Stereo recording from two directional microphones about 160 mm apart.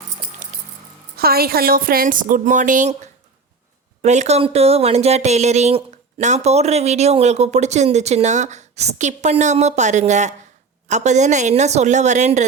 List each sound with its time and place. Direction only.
1.1 s a woman's voice: 70° right (ahead or behind); by 12.5 s 45° right (ahead or behind)